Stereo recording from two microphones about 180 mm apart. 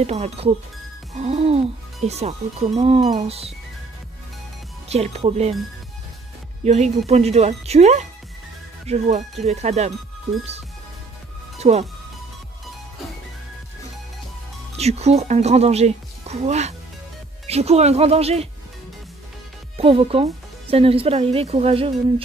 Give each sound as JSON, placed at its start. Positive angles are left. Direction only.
{"t": 0.0, "sound": "speech", "side_deg": -35}
{"t": 4.8, "sound": "speech", "side_deg": -35}
{"t": 6.6, "sound": "speech", "side_deg": -35}
{"t": 11.5, "sound": "music", "side_deg": -35}
{"t": 14.8, "sound": "speech", "side_deg": -35}
{"t": 19.8, "sound": "speech", "side_deg": -30}